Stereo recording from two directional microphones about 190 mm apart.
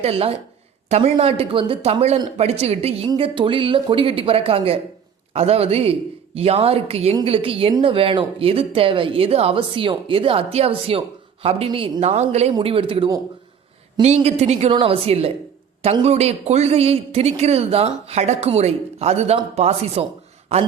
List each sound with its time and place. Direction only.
0.0 s a man's voice: 30° right (ahead or behind)